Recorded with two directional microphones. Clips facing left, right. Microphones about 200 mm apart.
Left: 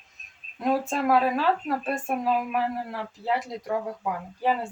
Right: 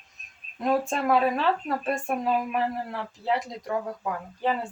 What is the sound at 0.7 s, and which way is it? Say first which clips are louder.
Speech: even; centre (ahead or behind).